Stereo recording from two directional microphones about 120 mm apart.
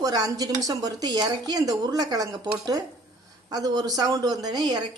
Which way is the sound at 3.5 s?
35° right (ahead or behind).